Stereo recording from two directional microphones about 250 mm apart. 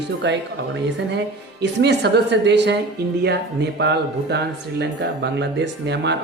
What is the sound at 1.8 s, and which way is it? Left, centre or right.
A woman's voice, right.